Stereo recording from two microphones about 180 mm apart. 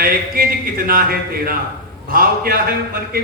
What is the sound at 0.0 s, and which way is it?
A man's voice, 55° right (ahead or behind).